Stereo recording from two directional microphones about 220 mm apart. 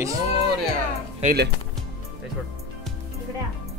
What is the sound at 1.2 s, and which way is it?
Speech, 50° right (ahead or behind).